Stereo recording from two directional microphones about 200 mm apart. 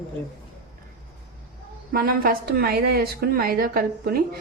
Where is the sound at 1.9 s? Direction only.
50° right (ahead or behind).